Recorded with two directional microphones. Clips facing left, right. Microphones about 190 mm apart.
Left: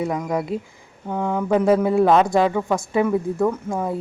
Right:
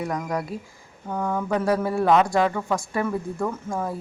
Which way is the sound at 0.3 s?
25° left (ahead or behind).